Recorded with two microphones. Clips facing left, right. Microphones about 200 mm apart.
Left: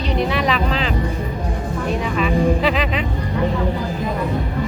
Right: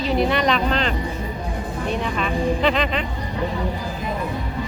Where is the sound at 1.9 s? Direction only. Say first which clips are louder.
Left 4 dB; 5° left (ahead or behind).